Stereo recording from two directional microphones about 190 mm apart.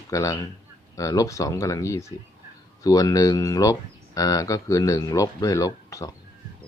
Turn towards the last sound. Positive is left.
turn(degrees=15)  # may be behind; listen again after turning